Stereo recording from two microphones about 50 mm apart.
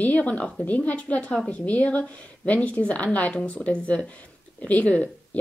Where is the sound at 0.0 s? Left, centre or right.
Left.